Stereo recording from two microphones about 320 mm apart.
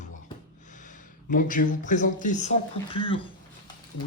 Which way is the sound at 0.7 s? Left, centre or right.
Left.